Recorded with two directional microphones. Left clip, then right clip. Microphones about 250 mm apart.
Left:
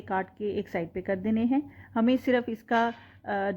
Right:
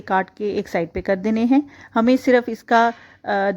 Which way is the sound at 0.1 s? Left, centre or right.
Right.